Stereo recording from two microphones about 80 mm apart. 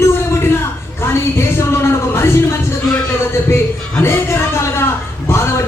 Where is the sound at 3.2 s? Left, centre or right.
Left.